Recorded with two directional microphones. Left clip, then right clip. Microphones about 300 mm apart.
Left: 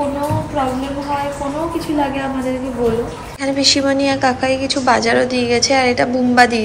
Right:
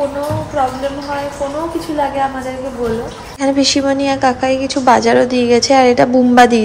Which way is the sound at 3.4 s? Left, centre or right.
Centre.